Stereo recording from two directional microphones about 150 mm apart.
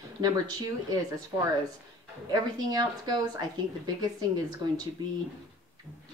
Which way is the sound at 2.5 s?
25° right (ahead or behind).